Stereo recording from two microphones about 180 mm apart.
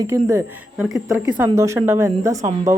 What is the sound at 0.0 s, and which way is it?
Speech, 15° right (ahead or behind).